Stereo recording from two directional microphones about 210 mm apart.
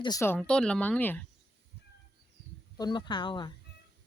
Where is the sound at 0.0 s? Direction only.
15° left (ahead or behind).